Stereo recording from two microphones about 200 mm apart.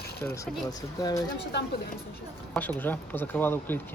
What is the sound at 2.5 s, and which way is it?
Speech, 10° left (ahead or behind).